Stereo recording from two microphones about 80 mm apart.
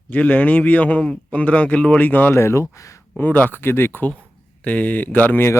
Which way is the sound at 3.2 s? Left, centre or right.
Left.